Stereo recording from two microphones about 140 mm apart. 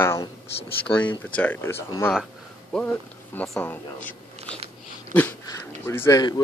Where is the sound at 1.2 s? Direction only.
10° left (ahead or behind).